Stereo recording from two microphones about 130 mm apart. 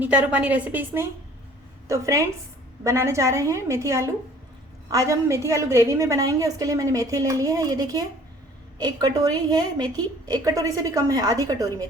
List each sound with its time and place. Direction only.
0.0 s a woman's voice: 10° right (ahead or behind); by 11.9 s 30° right (ahead or behind)